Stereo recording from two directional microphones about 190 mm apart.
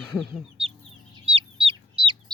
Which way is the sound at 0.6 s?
30° right (ahead or behind).